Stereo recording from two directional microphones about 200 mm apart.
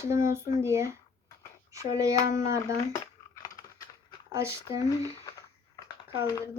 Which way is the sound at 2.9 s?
15° left (ahead or behind).